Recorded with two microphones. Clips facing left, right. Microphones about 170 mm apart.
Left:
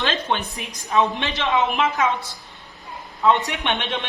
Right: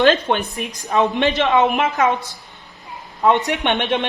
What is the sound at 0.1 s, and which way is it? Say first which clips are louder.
Speech: right 7 dB; 50° right (ahead or behind).